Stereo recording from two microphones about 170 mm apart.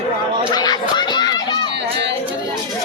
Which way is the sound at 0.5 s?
25° left (ahead or behind).